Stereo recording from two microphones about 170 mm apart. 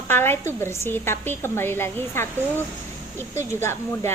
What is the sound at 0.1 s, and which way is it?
A woman's voice, 15° left (ahead or behind).